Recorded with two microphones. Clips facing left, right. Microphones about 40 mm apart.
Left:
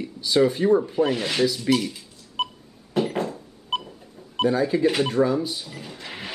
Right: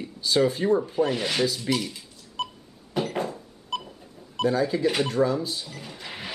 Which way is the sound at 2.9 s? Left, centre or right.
Centre.